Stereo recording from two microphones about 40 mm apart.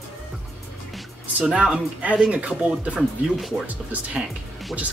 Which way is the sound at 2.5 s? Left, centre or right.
Right.